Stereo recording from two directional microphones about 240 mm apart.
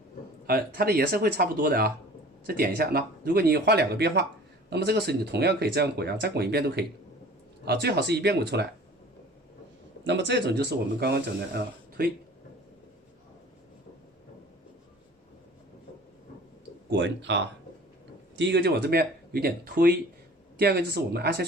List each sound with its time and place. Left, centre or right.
0.4 s speech: right
10.0 s speech: right
16.9 s speech: right